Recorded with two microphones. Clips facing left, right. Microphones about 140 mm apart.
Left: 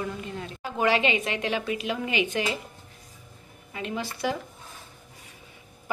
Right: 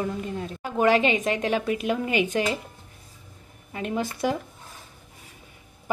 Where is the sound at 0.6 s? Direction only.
45° right (ahead or behind).